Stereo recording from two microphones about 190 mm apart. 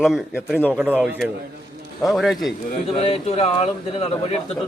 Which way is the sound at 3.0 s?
30° left (ahead or behind).